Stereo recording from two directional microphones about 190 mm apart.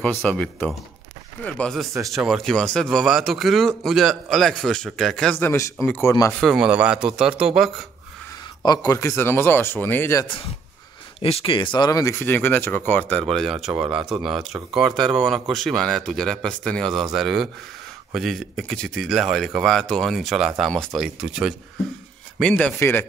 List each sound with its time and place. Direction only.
0.0 s speech: centre (ahead or behind)
6.4 s speech: 5° right (ahead or behind)
8.6 s speech: 20° left (ahead or behind)
10.2 s speech: 25° left (ahead or behind); by 23.0 s 10° left (ahead or behind)